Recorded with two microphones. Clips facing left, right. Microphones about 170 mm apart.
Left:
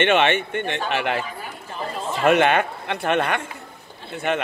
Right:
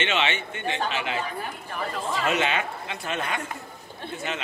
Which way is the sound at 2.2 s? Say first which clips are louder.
Left 10 dB; 55° left (ahead or behind).